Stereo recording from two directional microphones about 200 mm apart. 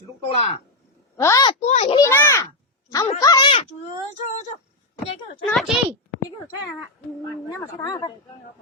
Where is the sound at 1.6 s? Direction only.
30° left (ahead or behind).